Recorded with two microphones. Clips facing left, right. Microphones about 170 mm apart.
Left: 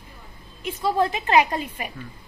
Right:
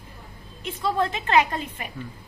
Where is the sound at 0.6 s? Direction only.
10° left (ahead or behind).